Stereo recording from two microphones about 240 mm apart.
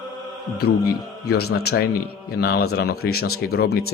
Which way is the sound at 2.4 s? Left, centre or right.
Left.